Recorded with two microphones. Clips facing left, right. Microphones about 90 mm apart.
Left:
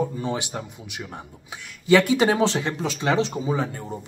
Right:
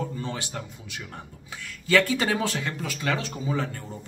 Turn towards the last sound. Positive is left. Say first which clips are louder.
# left 4 dB
turn(degrees=20)  # may be behind; listen again after turning